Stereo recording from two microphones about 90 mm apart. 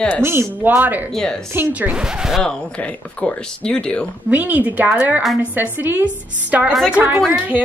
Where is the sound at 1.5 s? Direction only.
20° right (ahead or behind).